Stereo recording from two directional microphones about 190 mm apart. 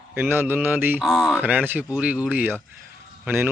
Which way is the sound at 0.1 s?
10° right (ahead or behind).